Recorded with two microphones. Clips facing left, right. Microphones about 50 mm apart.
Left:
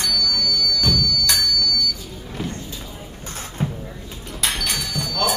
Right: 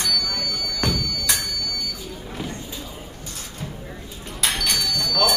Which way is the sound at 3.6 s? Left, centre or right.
Left.